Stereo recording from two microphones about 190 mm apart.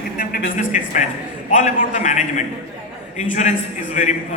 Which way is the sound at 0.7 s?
40° left (ahead or behind).